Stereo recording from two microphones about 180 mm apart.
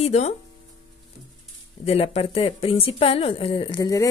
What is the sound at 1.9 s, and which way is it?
Speech, 35° left (ahead or behind).